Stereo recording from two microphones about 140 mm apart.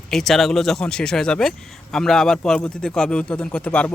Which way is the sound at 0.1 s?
Centre (ahead or behind).